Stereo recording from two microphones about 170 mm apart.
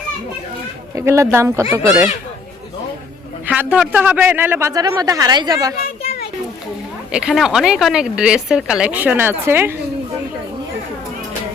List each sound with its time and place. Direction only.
0.9 s a man's voice: 15° right (ahead or behind)
3.4 s a man's voice: 10° right (ahead or behind)
5.7 s a sound: 60° left (ahead or behind)
7.1 s a woman's voice: 5° right (ahead or behind)